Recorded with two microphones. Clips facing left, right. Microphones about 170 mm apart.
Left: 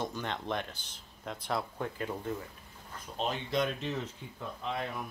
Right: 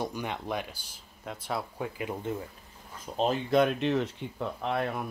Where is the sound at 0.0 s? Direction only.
10° right (ahead or behind).